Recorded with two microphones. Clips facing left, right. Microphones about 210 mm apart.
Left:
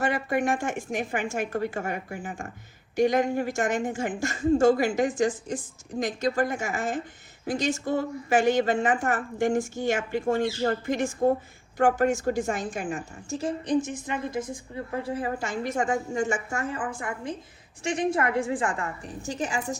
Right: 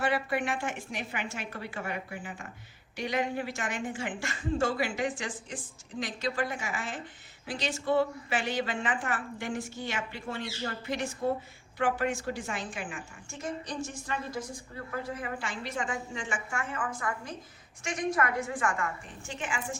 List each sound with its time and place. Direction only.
0.0 s speech: 45° left (ahead or behind)
13.7 s a woman's voice: 20° left (ahead or behind); by 19.7 s 40° left (ahead or behind)